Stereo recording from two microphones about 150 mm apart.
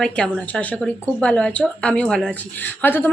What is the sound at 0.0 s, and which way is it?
Speech, 5° left (ahead or behind).